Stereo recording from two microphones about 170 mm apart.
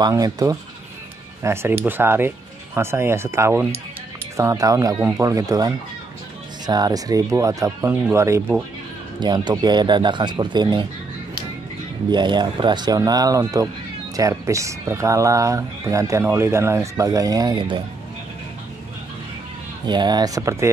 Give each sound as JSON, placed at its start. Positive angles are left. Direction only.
{"t": 0.0, "sound": "speech", "side_deg": -20}
{"t": 9.2, "sound": "speech", "side_deg": -25}
{"t": 12.1, "sound": "speech", "side_deg": -25}
{"t": 19.9, "sound": "speech", "side_deg": -25}